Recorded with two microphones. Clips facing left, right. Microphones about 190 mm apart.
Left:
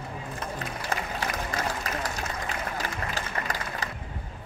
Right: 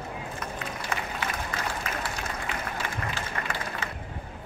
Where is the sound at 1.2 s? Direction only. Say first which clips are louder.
Left 2 dB; 35° left (ahead or behind).